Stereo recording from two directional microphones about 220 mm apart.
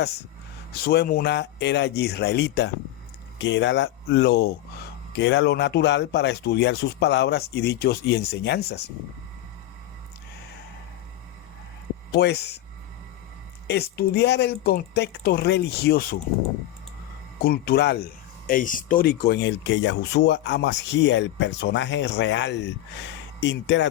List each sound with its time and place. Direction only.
0.7 s speech: 45° left (ahead or behind)
12.1 s speech: 50° left (ahead or behind)
13.7 s speech: 50° left (ahead or behind)
17.4 s speech: 45° left (ahead or behind)